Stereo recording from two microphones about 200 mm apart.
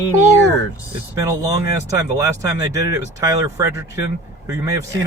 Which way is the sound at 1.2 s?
15° right (ahead or behind).